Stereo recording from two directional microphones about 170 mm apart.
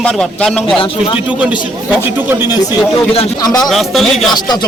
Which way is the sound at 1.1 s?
5° right (ahead or behind).